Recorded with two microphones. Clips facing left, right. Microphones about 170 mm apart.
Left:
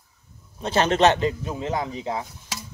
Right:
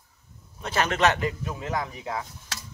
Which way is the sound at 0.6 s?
30° left (ahead or behind).